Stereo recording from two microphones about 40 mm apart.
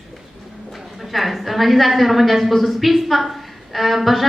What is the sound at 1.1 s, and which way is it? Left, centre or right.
Speech, centre.